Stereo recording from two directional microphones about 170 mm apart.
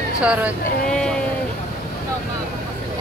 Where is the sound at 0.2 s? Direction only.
5° right (ahead or behind).